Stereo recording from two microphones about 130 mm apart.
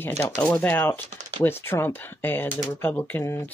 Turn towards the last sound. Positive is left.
turn(degrees=20)  # may be behind; listen again after turning